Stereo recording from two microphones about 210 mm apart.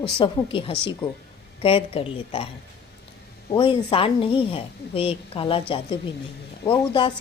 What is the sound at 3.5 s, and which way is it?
A woman's voice, 25° left (ahead or behind).